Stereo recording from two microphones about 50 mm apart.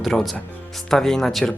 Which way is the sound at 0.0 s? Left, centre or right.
Centre.